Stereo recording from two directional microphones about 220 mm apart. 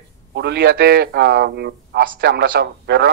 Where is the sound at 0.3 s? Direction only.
50° right (ahead or behind).